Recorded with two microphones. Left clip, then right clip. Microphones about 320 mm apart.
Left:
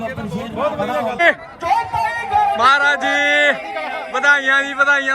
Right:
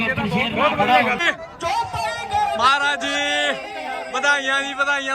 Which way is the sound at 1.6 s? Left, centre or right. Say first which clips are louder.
Left 5 dB; left.